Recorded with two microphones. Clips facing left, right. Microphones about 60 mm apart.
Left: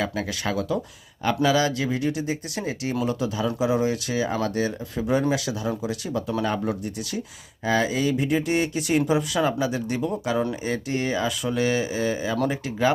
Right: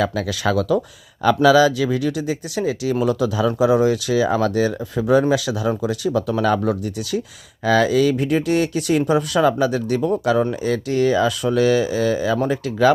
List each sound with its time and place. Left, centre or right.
0.1 s speech: right
2.9 s speech: right
10.5 s speech: right